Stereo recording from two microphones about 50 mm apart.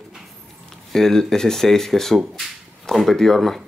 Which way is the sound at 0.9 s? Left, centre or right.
Centre.